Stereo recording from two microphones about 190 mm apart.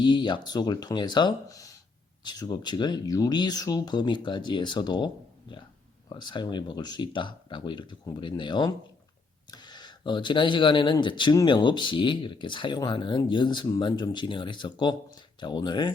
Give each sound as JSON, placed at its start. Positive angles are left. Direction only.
{"t": 0.0, "sound": "speech", "side_deg": 25}